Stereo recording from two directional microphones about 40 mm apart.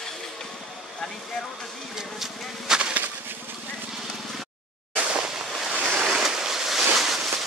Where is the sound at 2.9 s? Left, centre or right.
Right.